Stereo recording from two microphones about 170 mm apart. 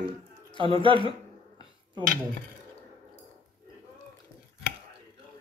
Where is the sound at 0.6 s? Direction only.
30° right (ahead or behind).